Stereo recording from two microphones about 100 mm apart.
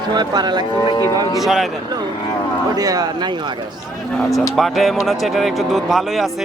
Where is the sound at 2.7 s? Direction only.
40° right (ahead or behind).